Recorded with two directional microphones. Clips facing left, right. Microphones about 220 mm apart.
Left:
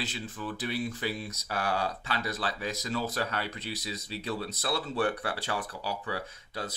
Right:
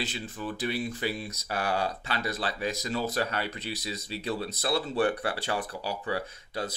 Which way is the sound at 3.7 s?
65° right (ahead or behind).